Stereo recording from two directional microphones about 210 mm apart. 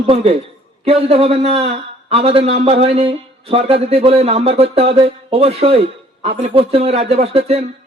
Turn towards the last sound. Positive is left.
turn(degrees=-30)  # may be behind; listen again after turning